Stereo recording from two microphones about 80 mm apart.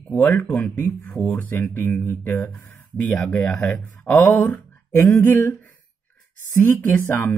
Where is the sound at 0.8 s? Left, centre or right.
Left.